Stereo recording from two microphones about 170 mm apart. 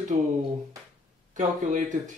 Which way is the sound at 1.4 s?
45° right (ahead or behind).